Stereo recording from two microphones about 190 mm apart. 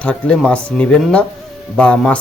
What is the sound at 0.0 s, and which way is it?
Speech, 5° left (ahead or behind).